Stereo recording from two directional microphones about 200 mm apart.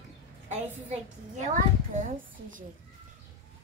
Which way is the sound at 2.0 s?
40° right (ahead or behind).